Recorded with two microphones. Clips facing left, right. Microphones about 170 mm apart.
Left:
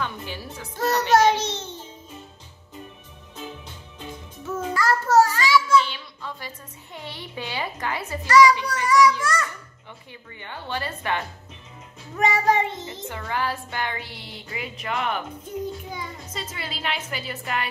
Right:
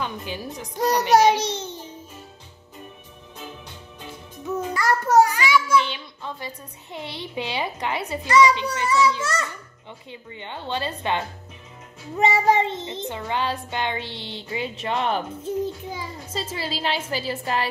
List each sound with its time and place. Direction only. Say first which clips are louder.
0.0 s a child's voice: right 2 dB; 15° right (ahead or behind)
4.5 s a child's voice: right 1 dB; 15° right (ahead or behind)
10.3 s child singing: right 2 dB; 20° right (ahead or behind)
15.9 s a child's voice: right 3 dB; 30° right (ahead or behind)